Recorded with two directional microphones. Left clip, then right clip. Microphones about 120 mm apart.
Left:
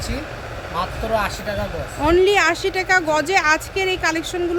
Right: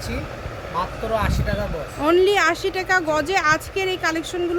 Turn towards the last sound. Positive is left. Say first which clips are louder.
# left 2 dB
turn(degrees=0)  # may be behind; listen again after turning